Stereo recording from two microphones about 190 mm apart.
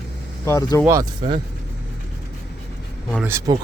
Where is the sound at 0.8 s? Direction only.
15° right (ahead or behind).